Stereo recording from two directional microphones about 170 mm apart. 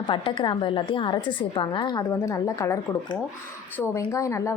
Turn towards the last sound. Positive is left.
turn(degrees=20)  # may be behind; listen again after turning